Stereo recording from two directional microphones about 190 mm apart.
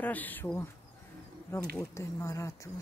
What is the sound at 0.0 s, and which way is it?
Speech, 10° left (ahead or behind).